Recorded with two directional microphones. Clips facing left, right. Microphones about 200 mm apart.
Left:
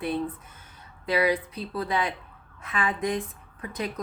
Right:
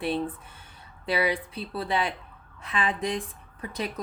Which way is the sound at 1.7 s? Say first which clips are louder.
Even; 30° right (ahead or behind).